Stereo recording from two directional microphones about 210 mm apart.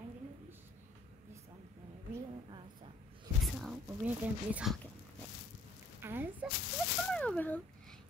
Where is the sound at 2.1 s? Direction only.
20° right (ahead or behind).